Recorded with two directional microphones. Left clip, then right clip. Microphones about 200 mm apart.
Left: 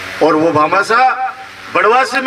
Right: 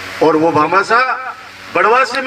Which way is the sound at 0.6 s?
50° left (ahead or behind).